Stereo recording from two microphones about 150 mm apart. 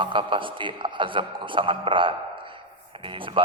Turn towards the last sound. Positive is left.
turn(degrees=-35)  # may be behind; listen again after turning